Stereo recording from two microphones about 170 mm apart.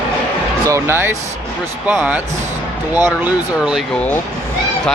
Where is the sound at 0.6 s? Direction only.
15° right (ahead or behind).